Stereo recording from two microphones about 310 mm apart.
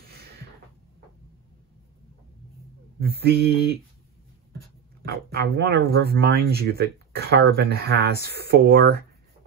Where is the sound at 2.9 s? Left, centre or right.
Right.